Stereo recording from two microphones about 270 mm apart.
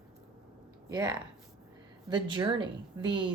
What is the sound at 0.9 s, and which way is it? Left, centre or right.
Speech, centre.